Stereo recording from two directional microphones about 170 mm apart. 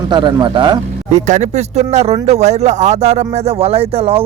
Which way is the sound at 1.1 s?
40° right (ahead or behind).